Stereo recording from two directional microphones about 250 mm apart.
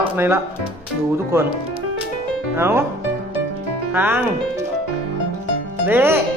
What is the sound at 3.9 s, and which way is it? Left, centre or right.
Speech, centre.